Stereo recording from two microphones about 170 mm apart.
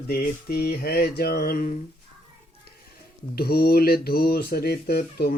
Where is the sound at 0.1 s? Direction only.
70° left (ahead or behind).